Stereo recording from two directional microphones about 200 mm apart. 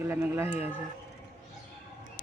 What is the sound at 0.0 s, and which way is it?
Speech, 15° right (ahead or behind).